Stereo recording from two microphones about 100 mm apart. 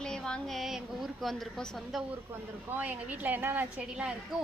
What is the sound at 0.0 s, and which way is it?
A woman's voice, 5° left (ahead or behind).